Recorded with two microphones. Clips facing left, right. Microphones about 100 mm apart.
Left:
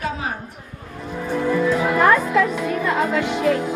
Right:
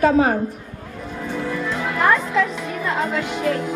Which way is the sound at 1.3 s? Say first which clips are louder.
Left 6 dB; 15° left (ahead or behind).